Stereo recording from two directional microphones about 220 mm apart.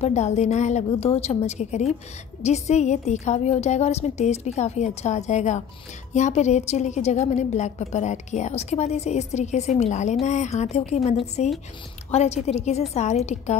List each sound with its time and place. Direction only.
0.0 s a woman's voice: 30° left (ahead or behind)